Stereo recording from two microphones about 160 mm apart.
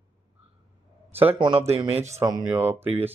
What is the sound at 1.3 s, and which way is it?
Speech, 35° right (ahead or behind).